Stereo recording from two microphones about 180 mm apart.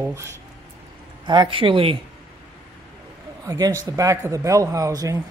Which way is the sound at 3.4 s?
20° right (ahead or behind).